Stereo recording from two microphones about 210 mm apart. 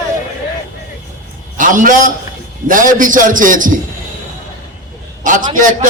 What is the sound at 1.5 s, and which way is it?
A man's voice, 40° right (ahead or behind).